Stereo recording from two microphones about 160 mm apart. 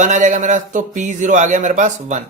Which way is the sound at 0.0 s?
50° right (ahead or behind).